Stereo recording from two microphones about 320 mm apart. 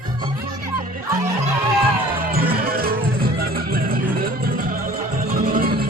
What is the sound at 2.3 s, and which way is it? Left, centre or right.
Music, right.